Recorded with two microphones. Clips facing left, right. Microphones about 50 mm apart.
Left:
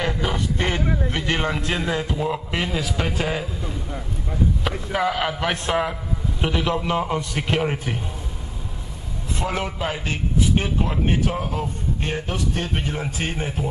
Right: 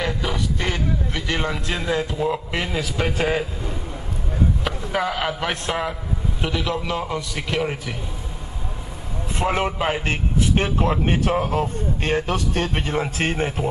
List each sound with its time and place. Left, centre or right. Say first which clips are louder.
0.0 s a sound: even; left
1.8 s a man's voice: right 1 dB; centre
4.6 s a man's voice: left 1 dB; centre
6.4 s a man's voice: left 2 dB; left
9.3 s a man's voice: right 4 dB; right
11.6 s a man's voice: right 3 dB; right
12.7 s speech: right 3 dB; right